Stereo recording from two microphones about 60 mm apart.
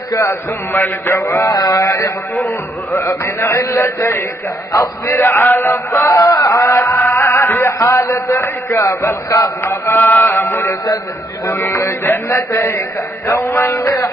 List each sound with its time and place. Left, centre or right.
0.8 s a man's voice: left
1.5 s a sound: left
2.4 s a man's voice: left
5.9 s a sound: left
7.1 s music: left
7.9 s a man's voice: left
9.9 s a man's voice: left
10.3 s a man's voice: left
13.3 s a sound: left